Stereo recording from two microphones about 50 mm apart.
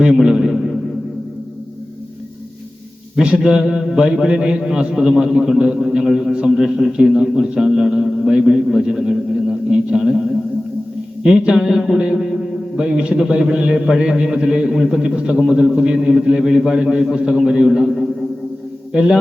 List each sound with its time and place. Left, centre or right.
0.0 s a sound: centre
3.2 s a man's voice: centre
11.9 s music: centre
12.7 s a man's voice: centre